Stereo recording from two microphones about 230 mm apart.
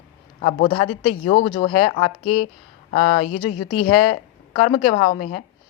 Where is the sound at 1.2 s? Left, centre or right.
Left.